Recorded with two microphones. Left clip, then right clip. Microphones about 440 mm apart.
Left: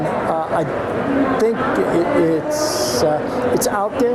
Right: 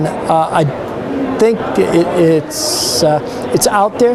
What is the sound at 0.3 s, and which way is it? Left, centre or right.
Speech, right.